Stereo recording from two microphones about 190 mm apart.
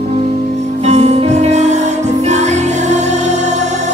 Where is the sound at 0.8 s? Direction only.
35° right (ahead or behind).